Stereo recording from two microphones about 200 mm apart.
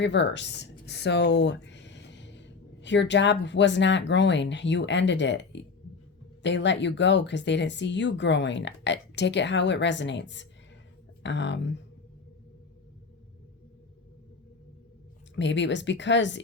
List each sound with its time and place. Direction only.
0.0 s speech: 60° left (ahead or behind)
15.4 s speech: 65° left (ahead or behind)